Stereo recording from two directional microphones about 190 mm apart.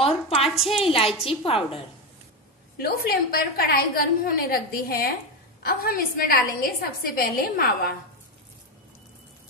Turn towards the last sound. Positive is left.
turn(degrees=50)  # may be behind; listen again after turning